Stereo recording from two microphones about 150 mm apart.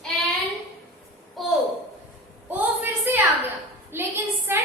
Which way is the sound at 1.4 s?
Centre (ahead or behind).